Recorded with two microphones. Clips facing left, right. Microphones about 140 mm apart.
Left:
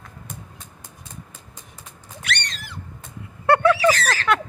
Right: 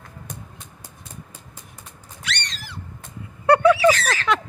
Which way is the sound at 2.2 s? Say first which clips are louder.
Left 2 dB; 55° left (ahead or behind).